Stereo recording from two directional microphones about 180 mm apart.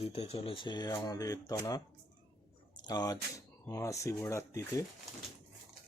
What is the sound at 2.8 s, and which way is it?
Speech, 20° left (ahead or behind).